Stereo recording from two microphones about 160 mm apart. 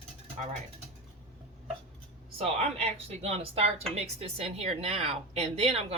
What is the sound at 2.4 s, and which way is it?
A woman's voice, 40° right (ahead or behind).